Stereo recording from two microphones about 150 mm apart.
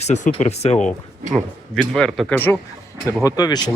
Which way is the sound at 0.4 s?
45° left (ahead or behind).